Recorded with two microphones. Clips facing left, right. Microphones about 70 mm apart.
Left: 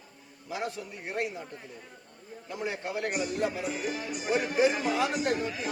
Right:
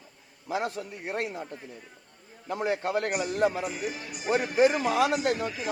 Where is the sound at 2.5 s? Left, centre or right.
Right.